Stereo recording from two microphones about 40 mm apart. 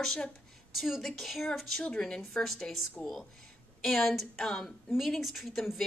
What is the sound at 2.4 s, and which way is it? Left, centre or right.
Speech, centre.